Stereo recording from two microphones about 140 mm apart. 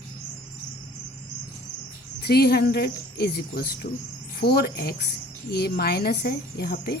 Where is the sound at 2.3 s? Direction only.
90° left.